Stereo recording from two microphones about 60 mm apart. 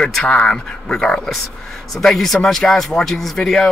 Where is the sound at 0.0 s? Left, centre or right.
Centre.